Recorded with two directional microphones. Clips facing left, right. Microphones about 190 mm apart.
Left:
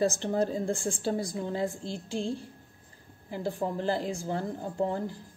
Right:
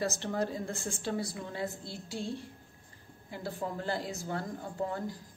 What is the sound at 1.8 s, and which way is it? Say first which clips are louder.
Music: left 6 dB; 90° left.